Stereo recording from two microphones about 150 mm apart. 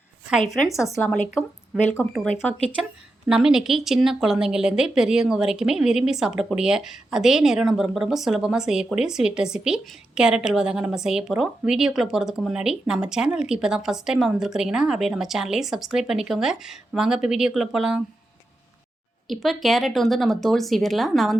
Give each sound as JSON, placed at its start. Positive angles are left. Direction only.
{"t": 0.7, "sound": "speech", "side_deg": 20}
{"t": 1.0, "sound": "speech", "side_deg": 10}
{"t": 3.2, "sound": "speech", "side_deg": -5}
{"t": 19.3, "sound": "speech", "side_deg": 0}